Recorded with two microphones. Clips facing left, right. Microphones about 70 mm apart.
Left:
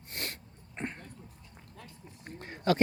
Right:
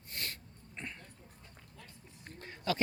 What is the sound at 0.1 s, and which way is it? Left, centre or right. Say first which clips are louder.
Sneeze: left 3 dB; left.